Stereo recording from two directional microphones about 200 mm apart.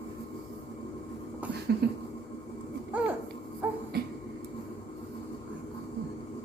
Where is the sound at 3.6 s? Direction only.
10° right (ahead or behind).